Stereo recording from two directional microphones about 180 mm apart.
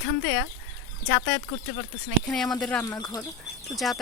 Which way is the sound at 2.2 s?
5° left (ahead or behind).